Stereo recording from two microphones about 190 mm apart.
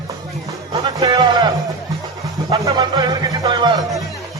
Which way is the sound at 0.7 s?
20° right (ahead or behind).